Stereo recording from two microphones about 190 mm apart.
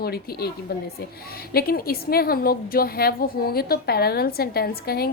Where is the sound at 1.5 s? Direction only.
55° left (ahead or behind).